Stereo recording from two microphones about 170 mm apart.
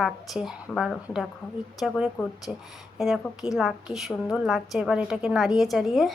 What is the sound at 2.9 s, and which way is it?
A woman's voice, centre (ahead or behind).